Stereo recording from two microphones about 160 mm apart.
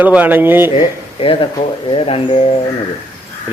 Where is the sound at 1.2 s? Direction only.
35° left (ahead or behind).